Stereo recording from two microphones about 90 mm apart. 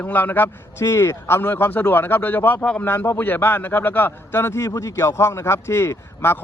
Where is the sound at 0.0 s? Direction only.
20° left (ahead or behind).